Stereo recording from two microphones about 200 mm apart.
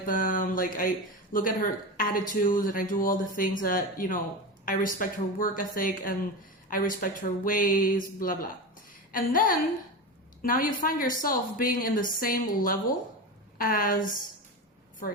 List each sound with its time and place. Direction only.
0.0 s speech: 40° left (ahead or behind)